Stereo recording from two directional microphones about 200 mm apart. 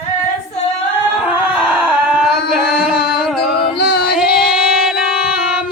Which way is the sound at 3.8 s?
50° left (ahead or behind).